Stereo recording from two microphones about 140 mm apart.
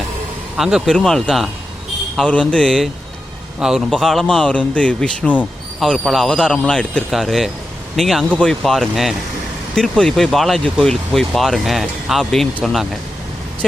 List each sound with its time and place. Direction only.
0.5 s a man's voice: centre (ahead or behind)